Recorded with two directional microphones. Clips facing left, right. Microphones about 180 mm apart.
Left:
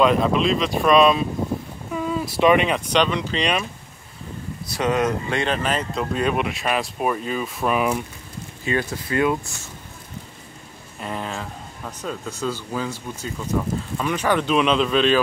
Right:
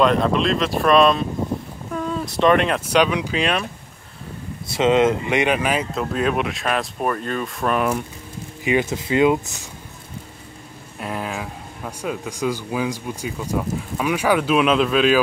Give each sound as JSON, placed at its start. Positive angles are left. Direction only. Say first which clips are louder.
{"t": 0.0, "sound": "speech", "louder": "even", "side_deg": 5}
{"t": 4.6, "sound": "speech", "louder": "right 5 dB", "side_deg": -25}
{"t": 8.6, "sound": "speech", "louder": "right 4 dB", "side_deg": -20}
{"t": 11.0, "sound": "speech", "louder": "right 2 dB", "side_deg": -5}